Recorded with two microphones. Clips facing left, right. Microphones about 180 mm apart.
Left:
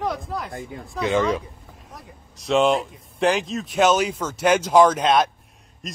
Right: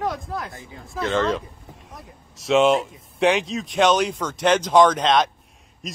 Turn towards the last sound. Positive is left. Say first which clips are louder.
# even
turn(degrees=5)  # may be behind; listen again after turning